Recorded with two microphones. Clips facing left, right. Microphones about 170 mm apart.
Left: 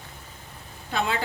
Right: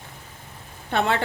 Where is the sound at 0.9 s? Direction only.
65° right (ahead or behind).